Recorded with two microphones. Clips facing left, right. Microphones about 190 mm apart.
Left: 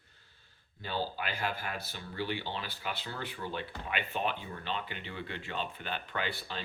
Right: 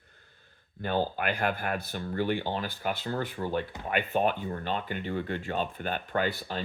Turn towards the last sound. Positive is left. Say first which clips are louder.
# right 7 dB
turn(degrees=-45)  # may be behind; listen again after turning